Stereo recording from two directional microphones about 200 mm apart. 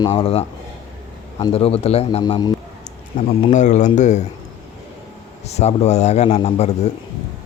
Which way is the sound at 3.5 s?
35° left (ahead or behind).